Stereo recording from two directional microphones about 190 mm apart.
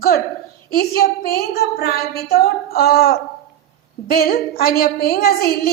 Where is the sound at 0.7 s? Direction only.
50° left (ahead or behind).